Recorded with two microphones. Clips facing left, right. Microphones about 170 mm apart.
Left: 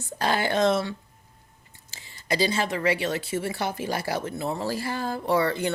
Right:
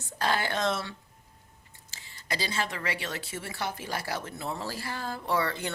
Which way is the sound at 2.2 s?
20° left (ahead or behind).